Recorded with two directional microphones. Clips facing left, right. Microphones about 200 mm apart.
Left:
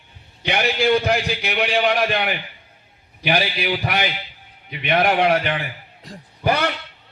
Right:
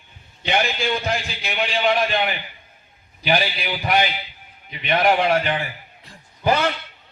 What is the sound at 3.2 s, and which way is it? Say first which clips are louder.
A man's voice: left 1 dB; 60° left (ahead or behind).